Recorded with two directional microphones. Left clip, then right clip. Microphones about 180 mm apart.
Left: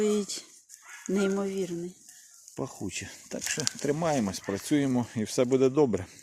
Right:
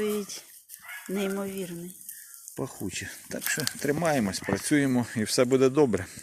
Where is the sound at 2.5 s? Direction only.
5° left (ahead or behind).